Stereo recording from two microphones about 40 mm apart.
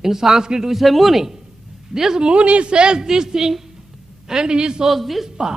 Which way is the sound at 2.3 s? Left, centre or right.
Right.